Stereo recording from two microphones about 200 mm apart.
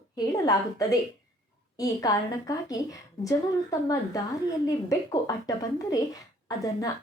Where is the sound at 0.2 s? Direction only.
20° left (ahead or behind).